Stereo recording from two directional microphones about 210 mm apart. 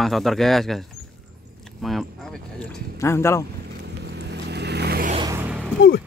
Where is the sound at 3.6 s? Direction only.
55° right (ahead or behind).